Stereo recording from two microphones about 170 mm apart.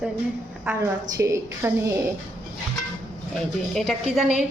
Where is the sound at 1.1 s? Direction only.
15° right (ahead or behind).